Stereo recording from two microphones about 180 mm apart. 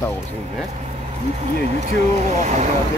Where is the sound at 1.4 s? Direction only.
40° right (ahead or behind).